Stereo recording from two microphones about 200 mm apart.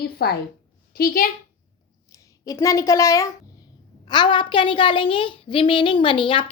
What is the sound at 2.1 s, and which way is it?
A woman's voice, 15° left (ahead or behind).